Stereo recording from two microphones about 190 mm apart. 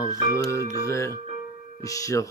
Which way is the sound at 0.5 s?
15° left (ahead or behind).